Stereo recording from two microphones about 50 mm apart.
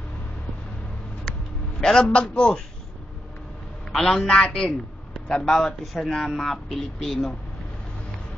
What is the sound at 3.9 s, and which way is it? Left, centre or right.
A man's voice, centre.